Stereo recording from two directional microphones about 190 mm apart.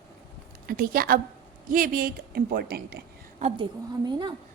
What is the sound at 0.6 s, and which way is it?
A woman's voice, 50° right (ahead or behind).